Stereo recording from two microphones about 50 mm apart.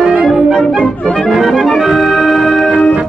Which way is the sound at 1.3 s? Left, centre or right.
Centre.